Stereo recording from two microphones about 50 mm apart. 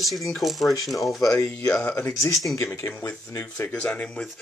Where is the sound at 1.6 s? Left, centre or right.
Left.